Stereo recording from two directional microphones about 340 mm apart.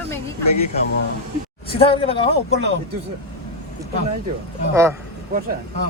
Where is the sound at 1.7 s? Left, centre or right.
Centre.